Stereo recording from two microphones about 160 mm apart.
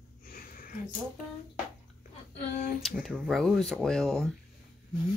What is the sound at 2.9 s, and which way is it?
Speech, 10° right (ahead or behind).